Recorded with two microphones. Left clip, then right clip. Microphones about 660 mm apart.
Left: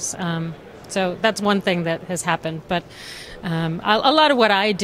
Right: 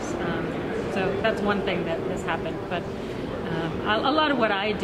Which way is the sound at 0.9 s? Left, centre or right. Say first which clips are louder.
Left 6 dB; left.